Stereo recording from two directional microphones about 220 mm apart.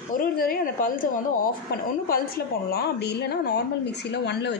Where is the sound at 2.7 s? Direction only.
50° left (ahead or behind).